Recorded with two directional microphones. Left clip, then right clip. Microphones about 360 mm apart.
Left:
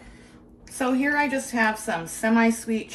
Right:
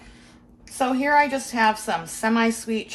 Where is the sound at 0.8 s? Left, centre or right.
Centre.